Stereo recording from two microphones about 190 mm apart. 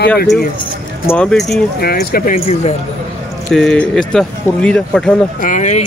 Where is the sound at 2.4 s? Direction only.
35° left (ahead or behind).